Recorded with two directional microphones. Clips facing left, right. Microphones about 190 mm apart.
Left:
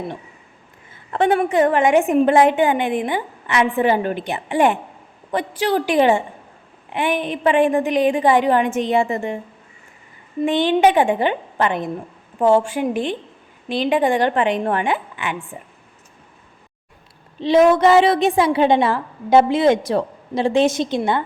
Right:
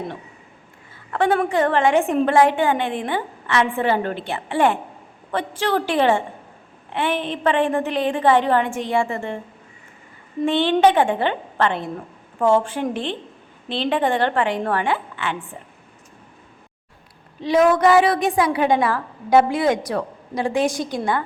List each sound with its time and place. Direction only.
1.1 s a woman's voice: 20° left (ahead or behind)
10.4 s a woman's voice: 15° left (ahead or behind)
17.4 s a woman's voice: 25° left (ahead or behind)